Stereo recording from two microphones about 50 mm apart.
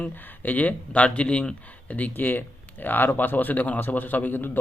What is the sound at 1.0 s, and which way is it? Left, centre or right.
A man's voice, left.